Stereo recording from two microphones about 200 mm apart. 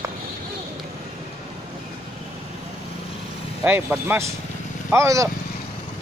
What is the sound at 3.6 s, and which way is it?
Speech, 10° right (ahead or behind).